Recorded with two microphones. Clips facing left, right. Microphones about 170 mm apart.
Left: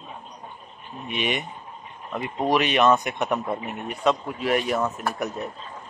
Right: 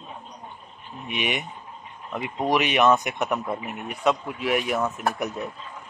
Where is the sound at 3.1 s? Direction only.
Centre (ahead or behind).